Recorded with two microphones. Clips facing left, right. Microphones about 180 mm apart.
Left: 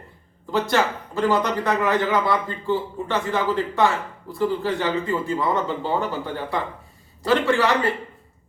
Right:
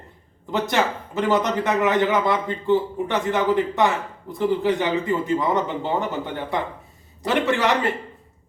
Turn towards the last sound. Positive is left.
turn(degrees=-20)  # may be behind; listen again after turning